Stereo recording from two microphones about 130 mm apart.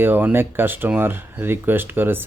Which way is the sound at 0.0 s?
15° right (ahead or behind).